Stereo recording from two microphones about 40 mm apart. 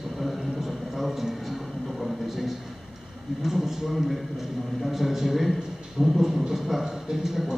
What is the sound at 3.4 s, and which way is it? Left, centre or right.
A man's voice, centre.